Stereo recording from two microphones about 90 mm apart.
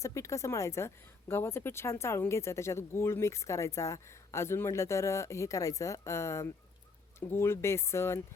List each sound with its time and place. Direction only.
0.0 s a woman's voice: 35° left (ahead or behind)